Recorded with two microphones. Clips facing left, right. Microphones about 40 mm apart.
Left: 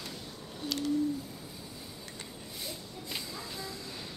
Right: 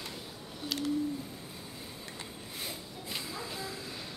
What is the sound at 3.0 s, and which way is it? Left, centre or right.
Hiss, centre.